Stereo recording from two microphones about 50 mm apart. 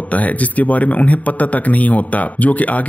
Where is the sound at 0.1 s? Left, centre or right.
Left.